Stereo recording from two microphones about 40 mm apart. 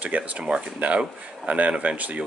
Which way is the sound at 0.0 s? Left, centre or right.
Right.